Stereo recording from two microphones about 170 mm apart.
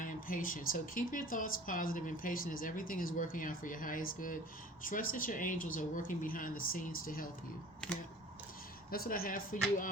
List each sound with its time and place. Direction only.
0.0 s speech: 50° left (ahead or behind)
8.9 s a woman's voice: 60° left (ahead or behind)